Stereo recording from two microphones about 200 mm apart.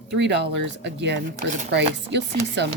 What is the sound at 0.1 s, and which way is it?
Speech, 60° right (ahead or behind).